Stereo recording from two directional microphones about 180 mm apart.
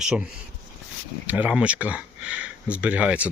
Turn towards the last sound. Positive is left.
turn(degrees=-5)  # may be behind; listen again after turning